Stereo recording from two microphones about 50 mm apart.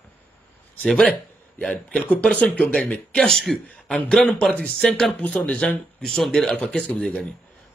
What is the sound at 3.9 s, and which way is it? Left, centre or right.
Speech, left.